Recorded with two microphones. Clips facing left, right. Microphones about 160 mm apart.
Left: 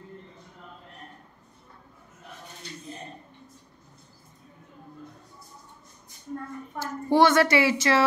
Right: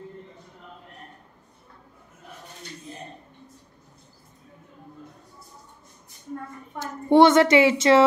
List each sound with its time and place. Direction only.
6.8 s a child's voice: 20° right (ahead or behind)